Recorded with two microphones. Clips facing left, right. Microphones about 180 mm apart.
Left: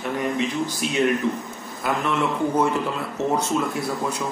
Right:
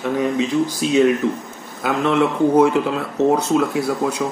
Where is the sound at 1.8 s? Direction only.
90° right.